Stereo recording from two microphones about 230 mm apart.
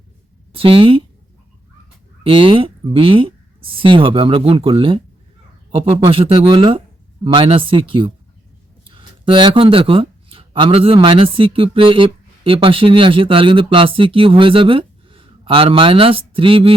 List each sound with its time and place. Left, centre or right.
0.5 s speech: right
2.2 s speech: right